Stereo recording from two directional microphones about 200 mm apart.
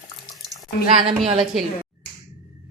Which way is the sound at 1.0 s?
30° right (ahead or behind).